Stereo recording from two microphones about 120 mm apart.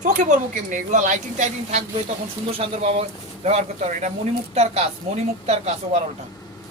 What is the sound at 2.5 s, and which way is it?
Speech, 50° right (ahead or behind).